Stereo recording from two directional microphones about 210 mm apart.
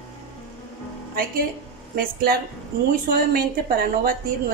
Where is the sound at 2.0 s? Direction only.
45° right (ahead or behind).